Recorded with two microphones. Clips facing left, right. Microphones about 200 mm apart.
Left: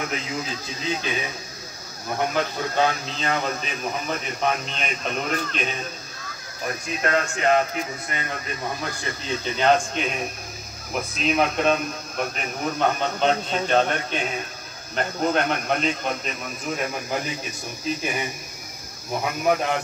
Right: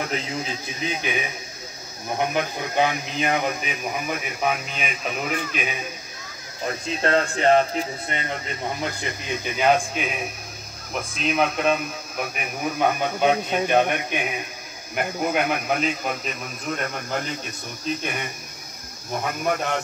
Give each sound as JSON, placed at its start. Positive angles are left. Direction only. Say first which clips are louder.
{"t": 0.4, "sound": "speech", "louder": "right 2 dB", "side_deg": -20}
{"t": 6.6, "sound": "speech", "louder": "right 2 dB", "side_deg": -30}